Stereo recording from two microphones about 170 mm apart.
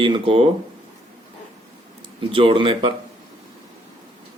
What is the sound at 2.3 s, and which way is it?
Speech, 30° right (ahead or behind).